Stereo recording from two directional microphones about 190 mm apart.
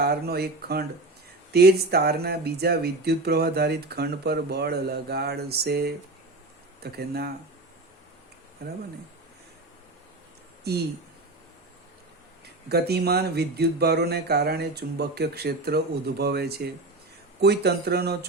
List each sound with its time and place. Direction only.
0.0 s speech: 55° right (ahead or behind)
8.6 s speech: 55° right (ahead or behind)
10.6 s speech: 55° right (ahead or behind)
12.6 s speech: 60° right (ahead or behind)